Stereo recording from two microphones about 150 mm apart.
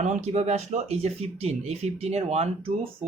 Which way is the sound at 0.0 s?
50° right (ahead or behind).